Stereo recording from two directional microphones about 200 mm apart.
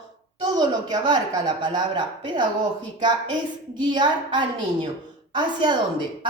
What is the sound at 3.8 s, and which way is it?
Speech, 20° right (ahead or behind).